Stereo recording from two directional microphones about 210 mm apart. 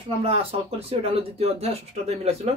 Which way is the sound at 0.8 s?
30° right (ahead or behind).